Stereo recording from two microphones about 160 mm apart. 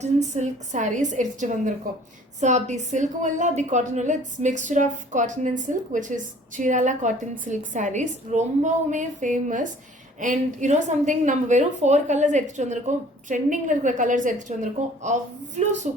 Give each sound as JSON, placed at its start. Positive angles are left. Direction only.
{"t": 0.0, "sound": "a woman's voice", "side_deg": -45}